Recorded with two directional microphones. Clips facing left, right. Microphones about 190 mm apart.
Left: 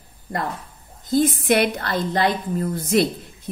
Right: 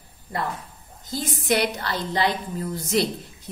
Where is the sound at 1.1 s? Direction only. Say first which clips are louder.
Left 7 dB; 55° left (ahead or behind).